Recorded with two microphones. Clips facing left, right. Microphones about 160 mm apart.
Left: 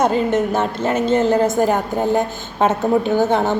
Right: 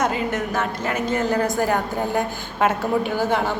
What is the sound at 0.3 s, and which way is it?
Speech, 25° left (ahead or behind).